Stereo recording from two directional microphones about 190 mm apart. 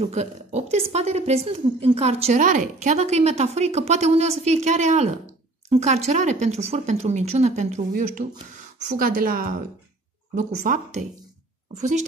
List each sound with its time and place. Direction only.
0.0 s speech: 35° right (ahead or behind)